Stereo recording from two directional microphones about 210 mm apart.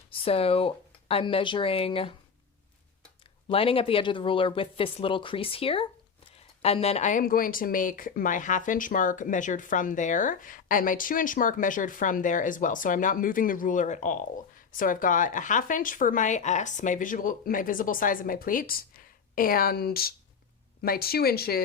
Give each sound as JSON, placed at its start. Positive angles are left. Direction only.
{"t": 0.1, "sound": "speech", "side_deg": 25}
{"t": 3.5, "sound": "speech", "side_deg": 25}